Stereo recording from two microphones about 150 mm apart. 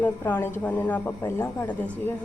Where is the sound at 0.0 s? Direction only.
10° left (ahead or behind).